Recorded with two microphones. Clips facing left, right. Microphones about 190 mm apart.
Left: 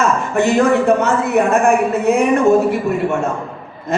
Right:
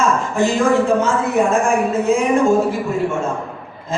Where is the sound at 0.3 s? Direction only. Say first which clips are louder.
Left 2 dB; 65° left (ahead or behind).